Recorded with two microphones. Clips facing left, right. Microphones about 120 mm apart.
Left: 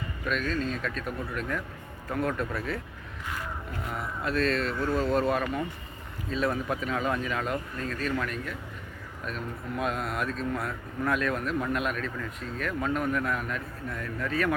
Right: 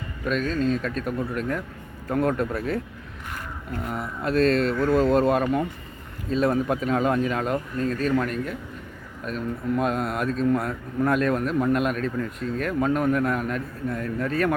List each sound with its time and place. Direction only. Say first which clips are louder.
0.3 s a man's voice: right 6 dB; 35° right (ahead or behind)
3.9 s a man's voice: right 6 dB; 35° right (ahead or behind)